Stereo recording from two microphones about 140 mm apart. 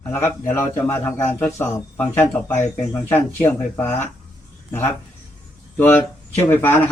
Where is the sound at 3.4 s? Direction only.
15° left (ahead or behind).